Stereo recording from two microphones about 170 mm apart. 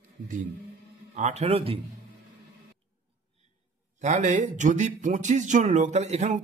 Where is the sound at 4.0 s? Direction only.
45° right (ahead or behind).